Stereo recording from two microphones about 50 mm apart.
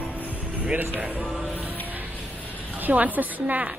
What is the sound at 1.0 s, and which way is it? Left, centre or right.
Speech, right.